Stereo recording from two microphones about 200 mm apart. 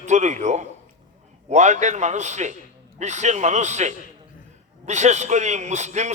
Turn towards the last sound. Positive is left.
turn(degrees=-35)  # may be behind; listen again after turning